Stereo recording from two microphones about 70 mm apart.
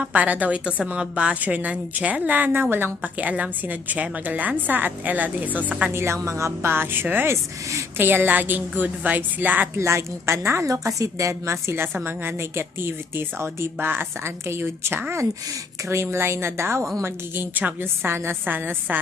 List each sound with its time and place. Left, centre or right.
0.0 s a woman's voice: right
5.9 s a woman's voice: right
9.7 s a woman's voice: right
10.7 s a woman's voice: right